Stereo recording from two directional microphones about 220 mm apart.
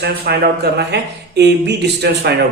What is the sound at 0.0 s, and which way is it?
A man's voice, 45° right (ahead or behind).